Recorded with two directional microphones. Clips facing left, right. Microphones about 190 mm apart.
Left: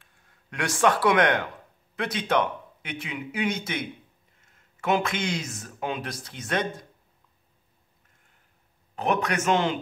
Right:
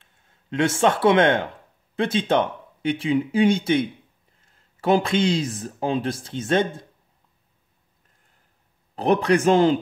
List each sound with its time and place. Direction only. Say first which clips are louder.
0.0 s speech: even; 25° right (ahead or behind)
8.9 s speech: right 7 dB; 35° right (ahead or behind)